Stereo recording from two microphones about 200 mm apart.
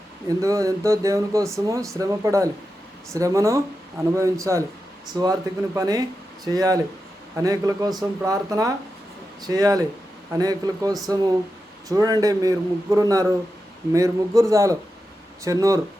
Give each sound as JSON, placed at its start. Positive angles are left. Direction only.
{"t": 0.3, "sound": "speech", "side_deg": -15}